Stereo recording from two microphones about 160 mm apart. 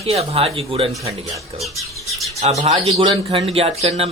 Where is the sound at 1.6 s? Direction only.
Centre (ahead or behind).